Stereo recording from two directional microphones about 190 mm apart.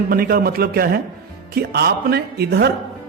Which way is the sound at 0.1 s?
50° right (ahead or behind).